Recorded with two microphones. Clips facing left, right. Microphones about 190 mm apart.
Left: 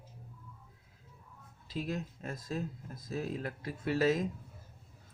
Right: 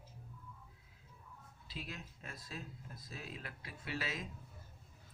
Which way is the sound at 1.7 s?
45° left (ahead or behind).